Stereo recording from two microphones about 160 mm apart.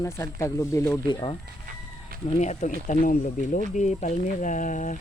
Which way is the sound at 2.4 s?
45° left (ahead or behind).